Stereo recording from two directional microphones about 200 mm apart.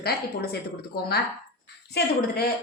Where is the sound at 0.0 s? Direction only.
50° left (ahead or behind).